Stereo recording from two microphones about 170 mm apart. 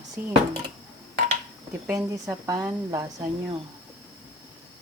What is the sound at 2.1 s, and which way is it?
Speech, 20° right (ahead or behind).